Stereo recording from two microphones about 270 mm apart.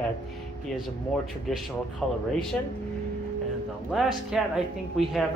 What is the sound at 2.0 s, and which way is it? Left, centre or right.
Speech, centre.